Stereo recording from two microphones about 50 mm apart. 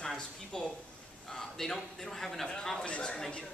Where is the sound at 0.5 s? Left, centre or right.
Centre.